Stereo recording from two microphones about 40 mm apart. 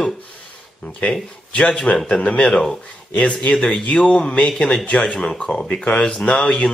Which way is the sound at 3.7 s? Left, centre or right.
Left.